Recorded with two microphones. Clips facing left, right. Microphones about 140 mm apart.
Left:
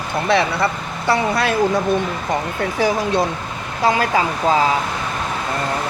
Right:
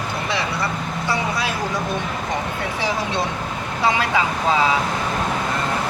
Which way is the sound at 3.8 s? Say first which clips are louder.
Left 3 dB; 45° left (ahead or behind).